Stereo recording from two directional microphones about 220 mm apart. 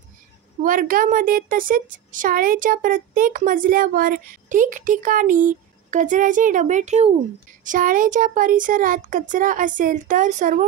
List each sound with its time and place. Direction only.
0.6 s speech: 35° right (ahead or behind)